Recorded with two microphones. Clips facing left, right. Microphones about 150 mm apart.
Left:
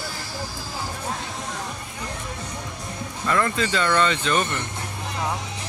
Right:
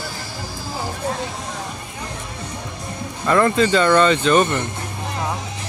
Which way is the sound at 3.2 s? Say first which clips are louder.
Right 7 dB; 35° right (ahead or behind).